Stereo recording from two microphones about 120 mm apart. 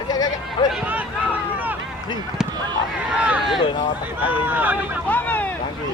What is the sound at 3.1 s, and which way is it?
Speech, 10° right (ahead or behind).